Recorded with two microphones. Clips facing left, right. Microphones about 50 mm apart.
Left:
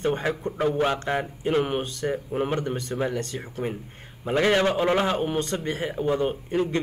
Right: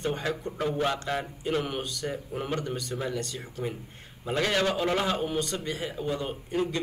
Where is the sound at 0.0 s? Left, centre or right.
Left.